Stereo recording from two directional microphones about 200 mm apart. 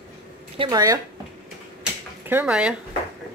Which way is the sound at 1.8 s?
10° right (ahead or behind).